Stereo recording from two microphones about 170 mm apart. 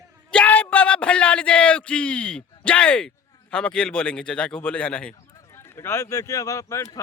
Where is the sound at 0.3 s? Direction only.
10° left (ahead or behind).